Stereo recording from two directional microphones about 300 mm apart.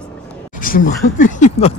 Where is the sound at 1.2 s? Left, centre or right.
Left.